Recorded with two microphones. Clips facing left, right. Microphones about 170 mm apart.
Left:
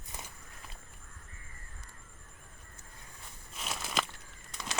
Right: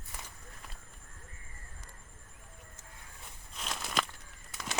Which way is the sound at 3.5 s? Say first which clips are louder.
Even; 5° left (ahead or behind).